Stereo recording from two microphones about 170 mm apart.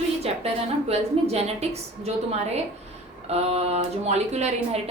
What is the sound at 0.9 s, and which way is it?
Speech, 40° right (ahead or behind).